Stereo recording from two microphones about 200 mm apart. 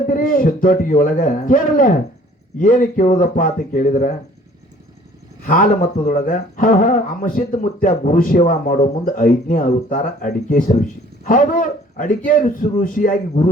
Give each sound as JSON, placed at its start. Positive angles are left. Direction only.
{"t": 0.1, "sound": "a man's voice", "side_deg": 45}
{"t": 5.5, "sound": "a man's voice", "side_deg": 40}